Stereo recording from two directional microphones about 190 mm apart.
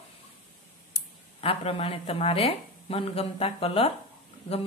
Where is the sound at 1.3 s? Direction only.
30° left (ahead or behind).